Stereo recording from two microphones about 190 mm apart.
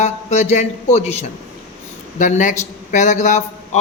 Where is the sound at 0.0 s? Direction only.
35° left (ahead or behind).